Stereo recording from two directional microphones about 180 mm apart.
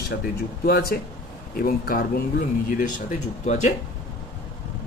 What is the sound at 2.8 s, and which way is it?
Speech, 40° left (ahead or behind).